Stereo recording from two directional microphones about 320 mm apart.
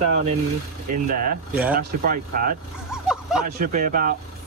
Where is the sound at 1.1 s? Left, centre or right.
Right.